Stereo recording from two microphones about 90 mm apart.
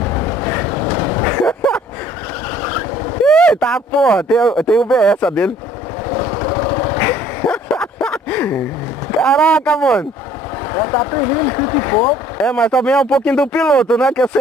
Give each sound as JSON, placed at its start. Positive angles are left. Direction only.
{"t": 0.0, "sound": "a sound", "side_deg": 20}
{"t": 3.3, "sound": "speech", "side_deg": 10}
{"t": 6.1, "sound": "vehicle", "side_deg": 25}
{"t": 9.2, "sound": "speech", "side_deg": 10}
{"t": 10.7, "sound": "speech", "side_deg": 25}
{"t": 12.4, "sound": "speech", "side_deg": 10}